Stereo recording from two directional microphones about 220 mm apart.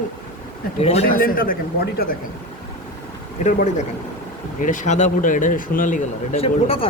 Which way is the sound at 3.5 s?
35° left (ahead or behind).